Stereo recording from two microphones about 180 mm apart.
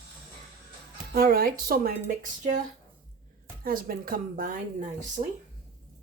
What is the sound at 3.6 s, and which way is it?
Speech, 55° right (ahead or behind).